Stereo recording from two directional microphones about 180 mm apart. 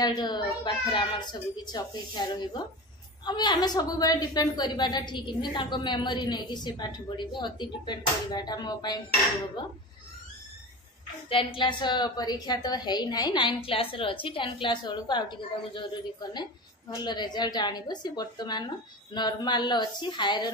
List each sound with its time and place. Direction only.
0.0 s a woman's voice: 25° left (ahead or behind)
11.2 s a woman's voice: 30° left (ahead or behind)